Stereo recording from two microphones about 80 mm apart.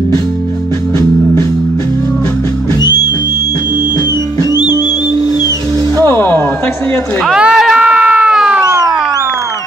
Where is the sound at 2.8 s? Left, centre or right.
Left.